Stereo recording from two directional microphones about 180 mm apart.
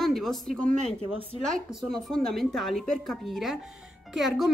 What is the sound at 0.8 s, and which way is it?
Speech, 35° right (ahead or behind).